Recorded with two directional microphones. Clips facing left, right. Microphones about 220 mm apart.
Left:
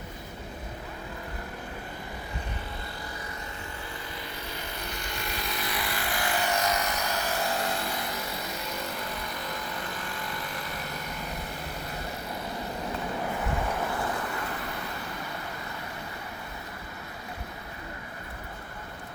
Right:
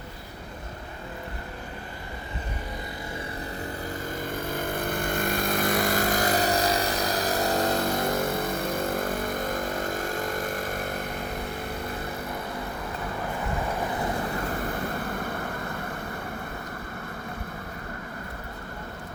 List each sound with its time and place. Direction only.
4.2 s vehicle: 50° right (ahead or behind)
14.6 s vehicle: 50° right (ahead or behind)